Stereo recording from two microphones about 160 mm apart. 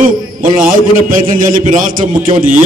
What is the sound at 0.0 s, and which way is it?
A man's voice, 55° right (ahead or behind).